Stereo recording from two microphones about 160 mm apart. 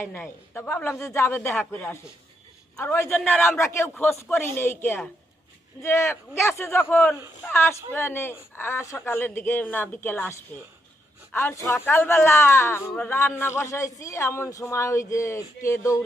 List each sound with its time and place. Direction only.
0.0 s a woman's voice: 15° left (ahead or behind)